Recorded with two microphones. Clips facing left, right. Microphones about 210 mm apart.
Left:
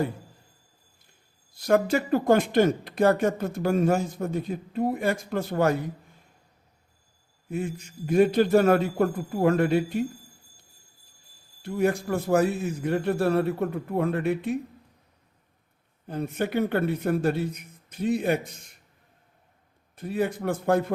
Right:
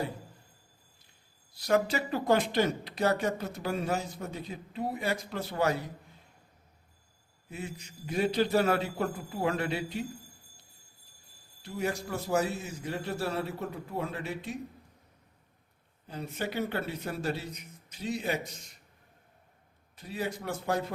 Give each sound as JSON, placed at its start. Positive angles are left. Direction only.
{"t": 1.5, "sound": "speech", "side_deg": 50}
{"t": 7.5, "sound": "speech", "side_deg": 50}
{"t": 11.6, "sound": "a man's voice", "side_deg": 55}
{"t": 16.0, "sound": "speech", "side_deg": 55}
{"t": 20.0, "sound": "speech", "side_deg": 55}